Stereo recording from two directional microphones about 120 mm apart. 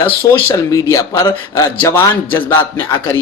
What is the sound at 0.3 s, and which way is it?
Speech, 25° left (ahead or behind).